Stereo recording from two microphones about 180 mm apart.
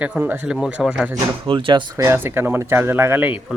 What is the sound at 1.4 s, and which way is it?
Speech, 30° right (ahead or behind).